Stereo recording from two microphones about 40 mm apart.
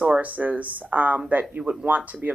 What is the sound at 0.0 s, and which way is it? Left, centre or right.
Speech, right.